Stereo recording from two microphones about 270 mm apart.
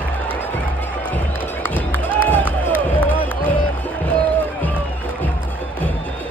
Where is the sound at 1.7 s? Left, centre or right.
Centre.